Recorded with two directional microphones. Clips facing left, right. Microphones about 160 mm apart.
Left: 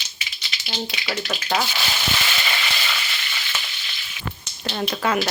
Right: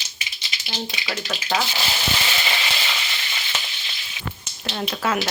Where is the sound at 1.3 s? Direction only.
10° left (ahead or behind).